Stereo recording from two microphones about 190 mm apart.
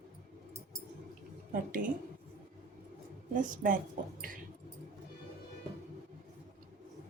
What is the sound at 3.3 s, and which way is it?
Speech, 45° right (ahead or behind).